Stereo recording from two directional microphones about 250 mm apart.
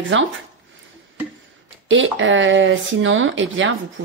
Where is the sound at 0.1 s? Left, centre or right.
Right.